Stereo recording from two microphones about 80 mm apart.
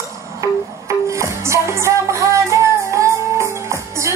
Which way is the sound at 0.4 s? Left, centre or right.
Right.